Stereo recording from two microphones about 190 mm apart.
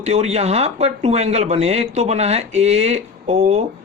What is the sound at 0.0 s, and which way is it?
Speech, 35° right (ahead or behind).